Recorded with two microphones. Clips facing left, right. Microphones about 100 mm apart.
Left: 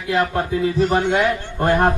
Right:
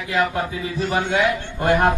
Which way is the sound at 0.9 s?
40° left (ahead or behind).